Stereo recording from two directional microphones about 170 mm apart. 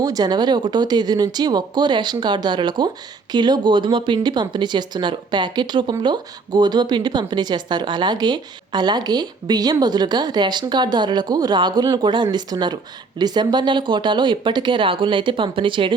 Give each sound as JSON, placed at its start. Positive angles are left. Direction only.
{"t": 0.0, "sound": "speech", "side_deg": -25}